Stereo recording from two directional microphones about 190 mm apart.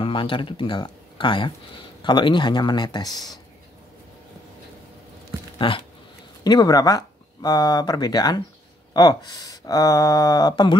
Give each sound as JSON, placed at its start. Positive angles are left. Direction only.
{"t": 0.0, "sound": "speech", "side_deg": 25}
{"t": 5.6, "sound": "speech", "side_deg": 25}